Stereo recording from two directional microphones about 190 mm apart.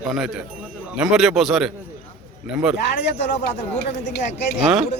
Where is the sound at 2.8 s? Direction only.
65° left (ahead or behind).